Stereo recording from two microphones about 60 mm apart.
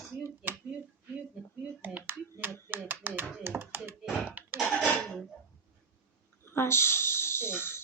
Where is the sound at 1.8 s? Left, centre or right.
Right.